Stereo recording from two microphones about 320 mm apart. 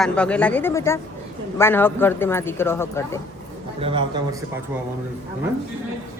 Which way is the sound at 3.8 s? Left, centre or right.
Centre.